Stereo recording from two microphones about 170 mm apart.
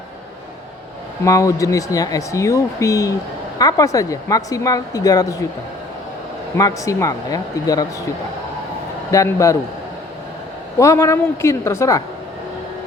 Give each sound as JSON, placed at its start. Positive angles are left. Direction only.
{"t": 1.2, "sound": "speech", "side_deg": 20}
{"t": 6.6, "sound": "speech", "side_deg": 20}
{"t": 9.1, "sound": "speech", "side_deg": 20}
{"t": 10.8, "sound": "a woman's voice", "side_deg": 20}